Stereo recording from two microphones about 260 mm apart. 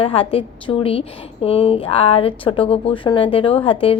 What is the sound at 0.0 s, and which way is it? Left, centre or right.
Speech, left.